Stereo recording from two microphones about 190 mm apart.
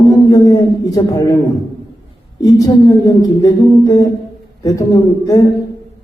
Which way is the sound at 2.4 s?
20° left (ahead or behind).